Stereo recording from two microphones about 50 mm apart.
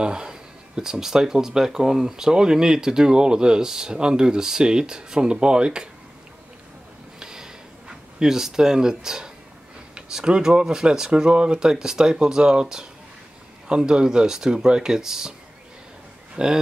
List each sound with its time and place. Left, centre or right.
0.0 s speech: centre
7.2 s a sound: centre
8.2 s speech: centre
16.4 s speech: centre